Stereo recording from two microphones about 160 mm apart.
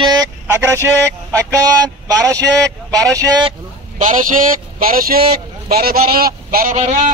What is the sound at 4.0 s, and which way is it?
Speech, 55° right (ahead or behind).